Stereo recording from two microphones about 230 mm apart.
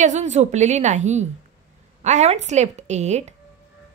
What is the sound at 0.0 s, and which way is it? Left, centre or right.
A woman's voice, right.